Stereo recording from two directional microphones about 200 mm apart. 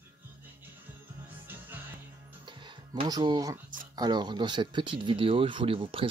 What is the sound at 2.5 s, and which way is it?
Music, 25° right (ahead or behind).